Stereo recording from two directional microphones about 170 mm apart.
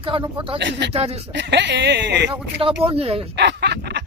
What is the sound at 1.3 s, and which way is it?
Speech, 90° right.